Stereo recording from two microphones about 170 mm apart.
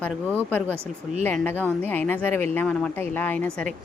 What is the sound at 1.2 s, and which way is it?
A woman's voice, 10° left (ahead or behind).